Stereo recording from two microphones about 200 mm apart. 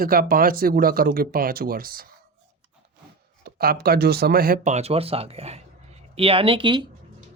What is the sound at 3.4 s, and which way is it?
Speech, 50° right (ahead or behind).